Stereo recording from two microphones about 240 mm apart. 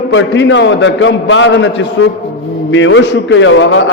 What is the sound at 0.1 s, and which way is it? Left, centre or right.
A man's voice, left.